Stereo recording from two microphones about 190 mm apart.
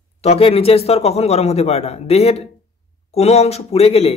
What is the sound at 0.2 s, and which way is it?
Speech, 30° left (ahead or behind).